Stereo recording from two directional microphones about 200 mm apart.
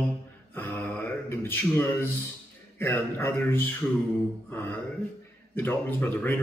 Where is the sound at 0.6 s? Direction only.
10° left (ahead or behind).